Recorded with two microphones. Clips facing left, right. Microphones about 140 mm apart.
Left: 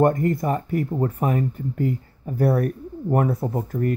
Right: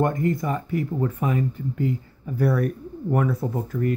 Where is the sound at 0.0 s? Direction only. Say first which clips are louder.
Left 3 dB; 45° left (ahead or behind).